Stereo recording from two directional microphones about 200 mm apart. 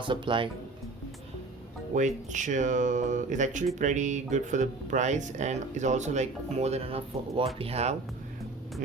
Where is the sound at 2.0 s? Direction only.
40° right (ahead or behind).